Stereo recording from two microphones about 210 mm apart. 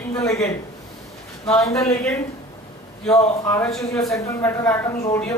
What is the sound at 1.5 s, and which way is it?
Speech, 15° left (ahead or behind).